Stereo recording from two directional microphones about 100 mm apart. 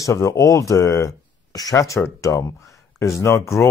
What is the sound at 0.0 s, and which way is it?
Speech, 30° left (ahead or behind).